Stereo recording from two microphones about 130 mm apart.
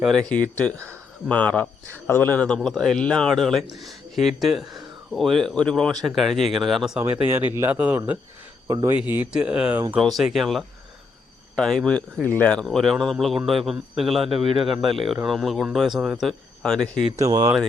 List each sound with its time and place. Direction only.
0.0 s a man's voice: 5° left (ahead or behind)
7.0 s speech: 15° right (ahead or behind)
8.6 s speech: 25° right (ahead or behind)
9.1 s a man's voice: 5° right (ahead or behind)
14.3 s a man's voice: 40° right (ahead or behind)
15.0 s a man's voice: 5° right (ahead or behind)
17.2 s speech: 25° right (ahead or behind)